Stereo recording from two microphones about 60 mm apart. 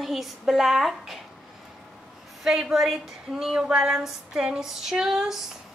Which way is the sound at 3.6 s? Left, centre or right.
Centre.